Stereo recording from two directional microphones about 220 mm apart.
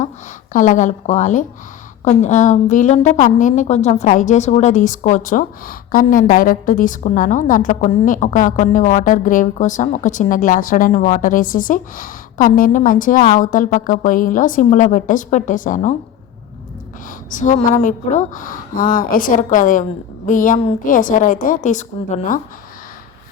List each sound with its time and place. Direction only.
0.5 s a woman's voice: 35° left (ahead or behind)
17.2 s a woman's voice: 35° left (ahead or behind)